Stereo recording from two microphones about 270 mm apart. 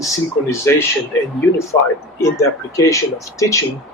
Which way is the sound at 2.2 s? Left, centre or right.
Centre.